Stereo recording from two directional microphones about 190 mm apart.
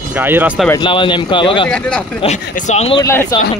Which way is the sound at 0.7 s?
25° left (ahead or behind).